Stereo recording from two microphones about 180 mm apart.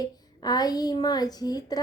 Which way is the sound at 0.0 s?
20° left (ahead or behind).